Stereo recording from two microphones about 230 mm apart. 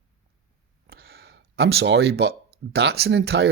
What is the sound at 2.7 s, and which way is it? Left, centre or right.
Speech, right.